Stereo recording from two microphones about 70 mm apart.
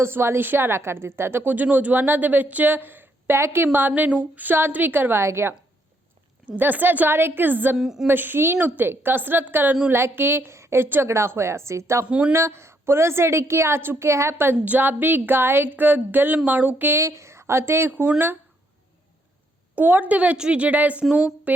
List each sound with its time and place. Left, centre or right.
0.0 s a woman's voice: right
1.5 s speech: right
6.6 s speech: right
7.8 s speech: centre
8.0 s a woman's voice: right
12.0 s speech: centre
12.3 s a woman's voice: right
17.0 s speech: right
19.7 s speech: right
21.5 s a sound: right